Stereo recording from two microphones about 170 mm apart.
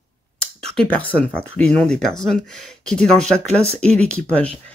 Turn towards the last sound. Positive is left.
turn(degrees=5)  # may be behind; listen again after turning